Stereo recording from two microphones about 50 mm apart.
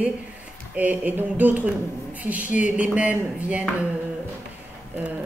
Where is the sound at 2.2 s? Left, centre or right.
Right.